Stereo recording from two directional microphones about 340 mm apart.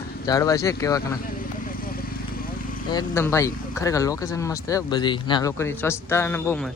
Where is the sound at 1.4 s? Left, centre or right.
Left.